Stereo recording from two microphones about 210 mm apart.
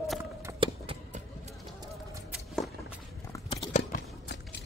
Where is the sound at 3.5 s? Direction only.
30° left (ahead or behind).